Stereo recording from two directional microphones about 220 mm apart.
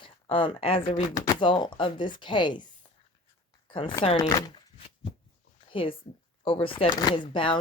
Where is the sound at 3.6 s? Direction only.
20° left (ahead or behind).